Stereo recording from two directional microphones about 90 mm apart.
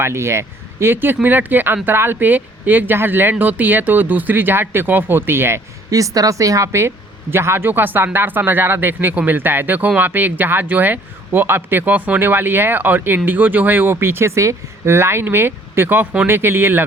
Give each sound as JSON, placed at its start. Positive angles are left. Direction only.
{"t": 0.0, "sound": "a man's voice", "side_deg": -30}
{"t": 5.9, "sound": "a man's voice", "side_deg": -40}